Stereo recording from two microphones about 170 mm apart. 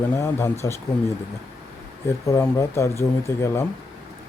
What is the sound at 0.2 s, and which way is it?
Speech, 15° left (ahead or behind).